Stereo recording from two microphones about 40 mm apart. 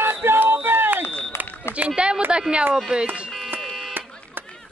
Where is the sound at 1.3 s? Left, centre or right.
Left.